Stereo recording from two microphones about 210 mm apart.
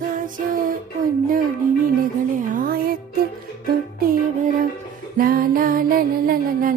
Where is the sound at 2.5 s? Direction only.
40° right (ahead or behind).